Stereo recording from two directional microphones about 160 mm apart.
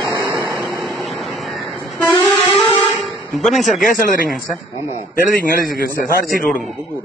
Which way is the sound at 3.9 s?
60° left (ahead or behind).